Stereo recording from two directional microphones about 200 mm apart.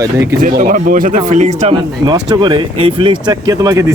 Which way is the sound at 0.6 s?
45° right (ahead or behind).